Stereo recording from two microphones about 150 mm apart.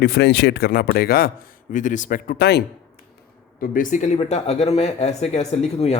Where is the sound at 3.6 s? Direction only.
65° left (ahead or behind).